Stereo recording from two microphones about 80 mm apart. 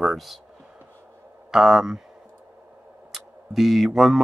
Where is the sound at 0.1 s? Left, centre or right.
Centre.